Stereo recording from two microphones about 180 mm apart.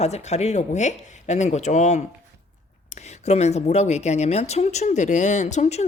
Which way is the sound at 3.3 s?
40° left (ahead or behind).